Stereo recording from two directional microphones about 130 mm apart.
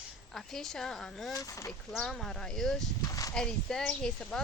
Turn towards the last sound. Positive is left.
turn(degrees=5)  # may be behind; listen again after turning